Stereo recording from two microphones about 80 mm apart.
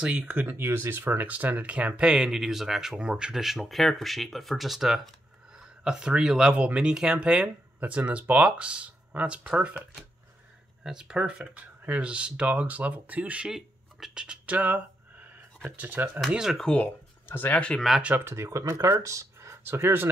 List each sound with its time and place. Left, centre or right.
0.0 s speech: centre
0.6 s speech: right
10.8 s speech: centre
16.3 s speech: centre
16.6 s speech: centre
17.6 s speech: centre
18.0 s speech: right
18.3 s speech: right